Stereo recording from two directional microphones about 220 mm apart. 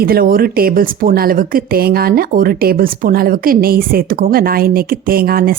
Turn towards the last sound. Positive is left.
turn(degrees=-40)  # may be behind; listen again after turning